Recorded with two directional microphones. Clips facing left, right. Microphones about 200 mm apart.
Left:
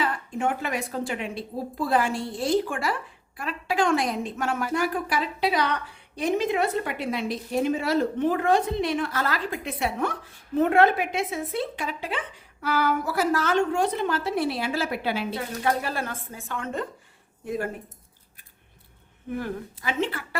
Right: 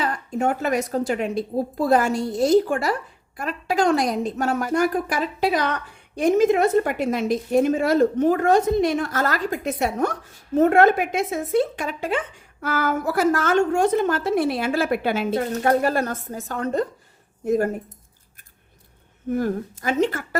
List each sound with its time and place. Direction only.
0.0 s a woman's voice: 40° right (ahead or behind)
19.3 s a woman's voice: 45° right (ahead or behind)